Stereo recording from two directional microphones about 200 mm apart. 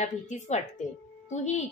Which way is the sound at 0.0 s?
35° left (ahead or behind).